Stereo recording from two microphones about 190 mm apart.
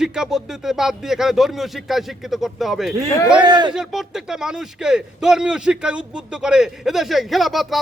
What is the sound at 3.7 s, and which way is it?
Speech, centre (ahead or behind).